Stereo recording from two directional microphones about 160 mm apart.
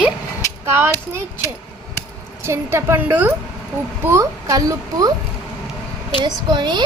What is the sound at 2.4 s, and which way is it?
A woman's voice, 15° right (ahead or behind).